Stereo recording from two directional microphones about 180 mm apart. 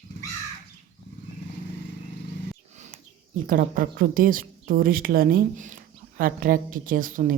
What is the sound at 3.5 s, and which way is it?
A woman's voice, 50° right (ahead or behind).